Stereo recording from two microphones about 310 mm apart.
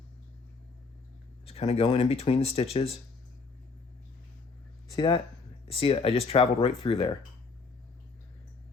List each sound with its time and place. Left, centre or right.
1.5 s speech: centre
4.9 s speech: centre